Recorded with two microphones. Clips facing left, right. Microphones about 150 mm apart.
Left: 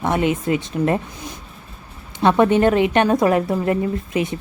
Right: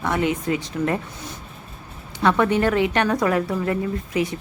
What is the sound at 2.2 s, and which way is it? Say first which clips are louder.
A woman's voice: left 4 dB; 20° left (ahead or behind).